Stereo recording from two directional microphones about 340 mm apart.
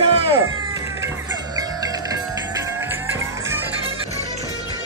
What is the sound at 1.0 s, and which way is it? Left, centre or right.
Music, centre.